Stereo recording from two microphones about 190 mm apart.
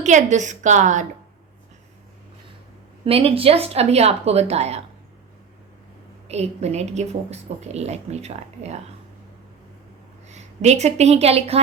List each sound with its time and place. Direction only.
0.0 s a woman's voice: 40° right (ahead or behind)
3.0 s a woman's voice: 30° right (ahead or behind)
6.2 s a woman's voice: 35° right (ahead or behind)
10.2 s a woman's voice: 35° right (ahead or behind)